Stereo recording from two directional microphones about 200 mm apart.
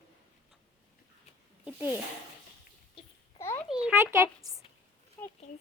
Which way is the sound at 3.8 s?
15° right (ahead or behind).